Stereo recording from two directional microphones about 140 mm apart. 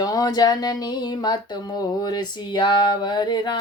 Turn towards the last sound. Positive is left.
turn(degrees=30)  # may be behind; listen again after turning